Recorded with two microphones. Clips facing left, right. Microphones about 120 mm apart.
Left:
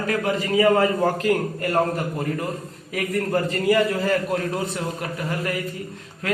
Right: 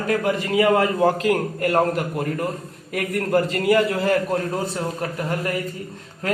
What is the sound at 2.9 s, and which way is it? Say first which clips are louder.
A man's voice: right 2 dB; 60° right (ahead or behind).